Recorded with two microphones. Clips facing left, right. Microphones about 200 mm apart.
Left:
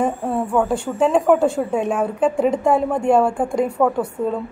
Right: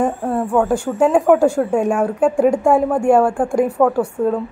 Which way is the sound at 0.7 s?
10° right (ahead or behind).